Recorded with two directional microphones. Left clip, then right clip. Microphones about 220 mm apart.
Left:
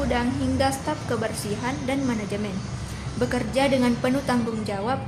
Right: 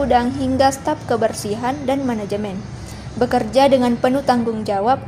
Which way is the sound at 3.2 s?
25° right (ahead or behind).